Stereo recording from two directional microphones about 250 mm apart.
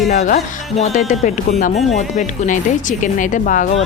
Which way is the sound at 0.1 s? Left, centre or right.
Left.